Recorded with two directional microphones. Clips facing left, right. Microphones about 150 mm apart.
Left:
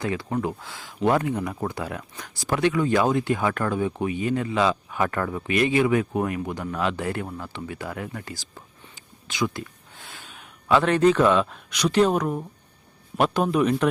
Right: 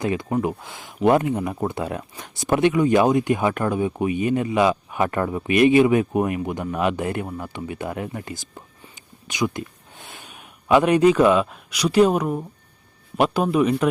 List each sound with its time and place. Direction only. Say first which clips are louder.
0.0 s a man's voice: right 4 dB; 20° right (ahead or behind)